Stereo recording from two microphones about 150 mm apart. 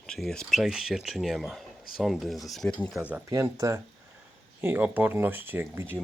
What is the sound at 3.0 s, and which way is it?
Speech, 10° right (ahead or behind).